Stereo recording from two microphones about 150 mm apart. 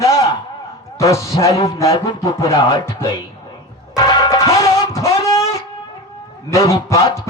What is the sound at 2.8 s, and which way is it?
Speech, 15° left (ahead or behind).